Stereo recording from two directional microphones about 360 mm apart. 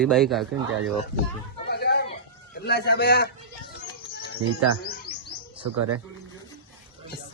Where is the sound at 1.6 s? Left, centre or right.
Left.